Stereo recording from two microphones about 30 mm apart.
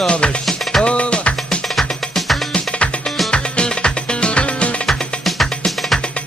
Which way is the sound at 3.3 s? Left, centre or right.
Left.